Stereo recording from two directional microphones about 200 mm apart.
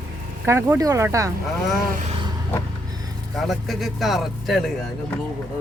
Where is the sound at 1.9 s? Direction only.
35° right (ahead or behind).